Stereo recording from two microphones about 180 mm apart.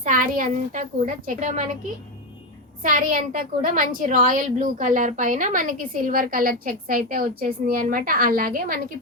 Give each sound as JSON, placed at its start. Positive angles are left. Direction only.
{"t": 0.0, "sound": "a woman's voice", "side_deg": -50}
{"t": 2.8, "sound": "a woman's voice", "side_deg": -50}